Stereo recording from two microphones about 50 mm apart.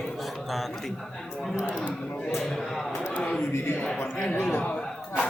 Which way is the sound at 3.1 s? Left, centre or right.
Left.